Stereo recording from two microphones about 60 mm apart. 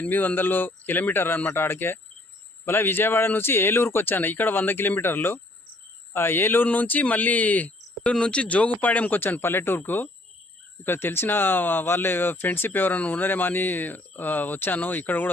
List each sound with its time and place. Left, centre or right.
0.0 s speech: left